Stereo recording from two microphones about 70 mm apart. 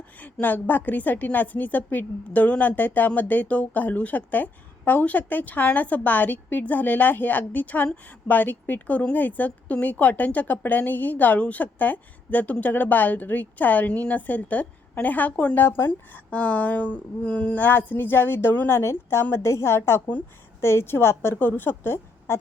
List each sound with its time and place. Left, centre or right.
0.2 s a woman's voice: left
18.8 s a woman's voice: left